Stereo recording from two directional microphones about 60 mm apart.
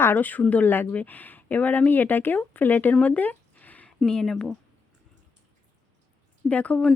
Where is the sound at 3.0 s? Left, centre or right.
Left.